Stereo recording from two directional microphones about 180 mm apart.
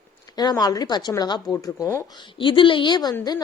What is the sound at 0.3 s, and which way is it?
A woman's voice, 20° left (ahead or behind).